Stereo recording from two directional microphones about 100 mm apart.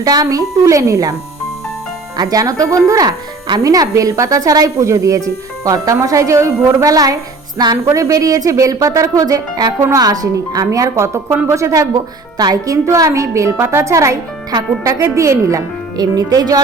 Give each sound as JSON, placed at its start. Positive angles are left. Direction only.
{"t": 0.0, "sound": "speech", "side_deg": -35}
{"t": 2.1, "sound": "speech", "side_deg": -35}